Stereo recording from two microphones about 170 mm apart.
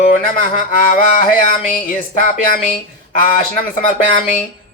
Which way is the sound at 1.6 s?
55° left (ahead or behind).